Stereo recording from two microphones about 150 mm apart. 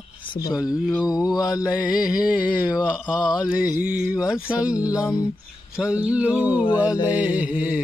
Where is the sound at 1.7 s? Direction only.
5° right (ahead or behind).